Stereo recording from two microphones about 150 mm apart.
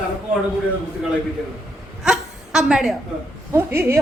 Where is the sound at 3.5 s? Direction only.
15° right (ahead or behind).